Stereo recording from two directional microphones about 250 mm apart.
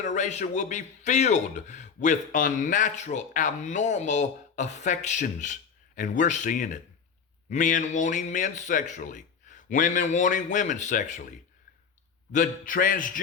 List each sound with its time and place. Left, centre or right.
0.0 s a man's voice: left
12.3 s a man's voice: left